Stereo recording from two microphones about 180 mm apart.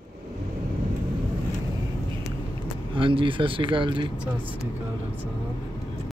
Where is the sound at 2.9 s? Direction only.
30° right (ahead or behind).